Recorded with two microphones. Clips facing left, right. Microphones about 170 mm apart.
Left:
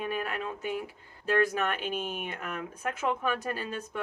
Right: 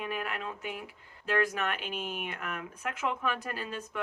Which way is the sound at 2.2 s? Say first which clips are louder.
Left 2 dB; 35° left (ahead or behind).